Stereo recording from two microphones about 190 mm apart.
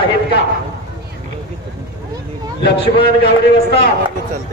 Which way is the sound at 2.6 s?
60° left (ahead or behind).